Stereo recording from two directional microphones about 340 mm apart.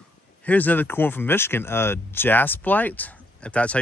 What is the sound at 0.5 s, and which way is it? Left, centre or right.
Speech, centre.